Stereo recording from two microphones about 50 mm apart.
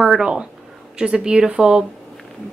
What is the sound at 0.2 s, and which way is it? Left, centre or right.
A woman's voice, centre.